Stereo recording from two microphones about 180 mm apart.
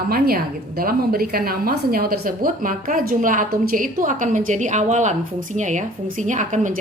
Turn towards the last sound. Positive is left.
turn(degrees=-45)  # may be behind; listen again after turning